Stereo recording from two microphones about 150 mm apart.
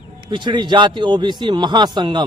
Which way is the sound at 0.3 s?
30° right (ahead or behind).